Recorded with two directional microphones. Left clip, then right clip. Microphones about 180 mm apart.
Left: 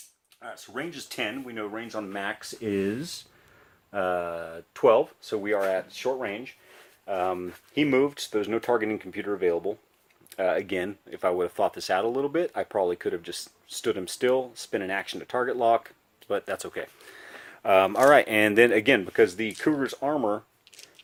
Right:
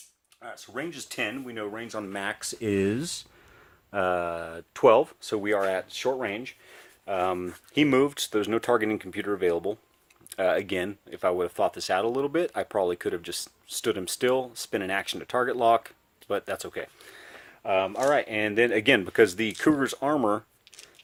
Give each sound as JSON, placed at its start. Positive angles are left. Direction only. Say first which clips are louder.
{"t": 0.4, "sound": "speech", "louder": "even", "side_deg": -35}
{"t": 17.6, "sound": "speech", "louder": "left 5 dB", "side_deg": 30}
{"t": 19.0, "sound": "speech", "louder": "right 1 dB", "side_deg": -30}